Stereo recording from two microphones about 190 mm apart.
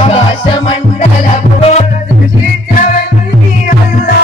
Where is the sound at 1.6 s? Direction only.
35° left (ahead or behind).